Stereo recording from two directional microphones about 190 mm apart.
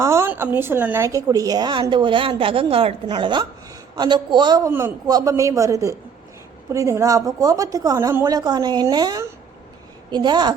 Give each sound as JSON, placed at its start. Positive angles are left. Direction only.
{"t": 0.0, "sound": "a woman's voice", "side_deg": -15}